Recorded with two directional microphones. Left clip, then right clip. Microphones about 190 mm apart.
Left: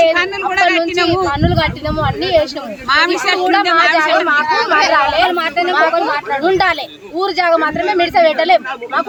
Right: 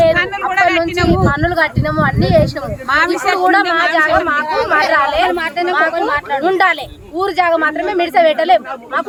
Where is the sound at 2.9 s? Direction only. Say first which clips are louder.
Left 1 dB; 75° right (ahead or behind).